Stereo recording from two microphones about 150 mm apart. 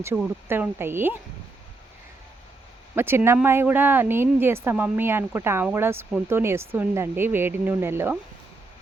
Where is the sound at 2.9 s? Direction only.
15° right (ahead or behind).